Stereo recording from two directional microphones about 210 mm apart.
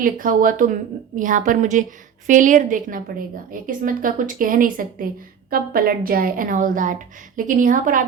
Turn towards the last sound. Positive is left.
turn(degrees=-40)  # may be behind; listen again after turning